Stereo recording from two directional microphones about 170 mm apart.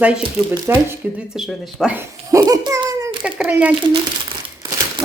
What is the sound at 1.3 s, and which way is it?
Speech, centre (ahead or behind).